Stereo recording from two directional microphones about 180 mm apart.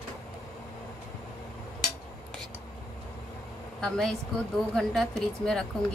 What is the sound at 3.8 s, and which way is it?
A woman's voice, 5° left (ahead or behind).